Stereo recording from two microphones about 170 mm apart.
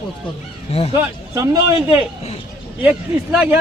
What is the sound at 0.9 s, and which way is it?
Speech, 15° right (ahead or behind).